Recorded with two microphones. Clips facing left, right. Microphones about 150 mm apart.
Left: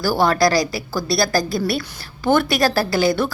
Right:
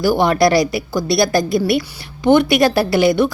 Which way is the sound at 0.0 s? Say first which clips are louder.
Right 3 dB; 20° right (ahead or behind).